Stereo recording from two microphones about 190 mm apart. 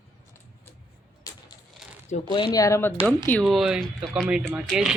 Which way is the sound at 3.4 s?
Centre (ahead or behind).